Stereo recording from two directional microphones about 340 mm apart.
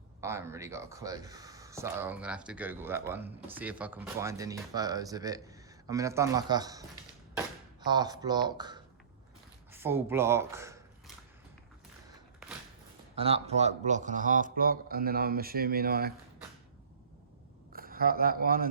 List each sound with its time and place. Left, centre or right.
0.2 s speech: centre
13.1 s speech: centre
17.7 s speech: right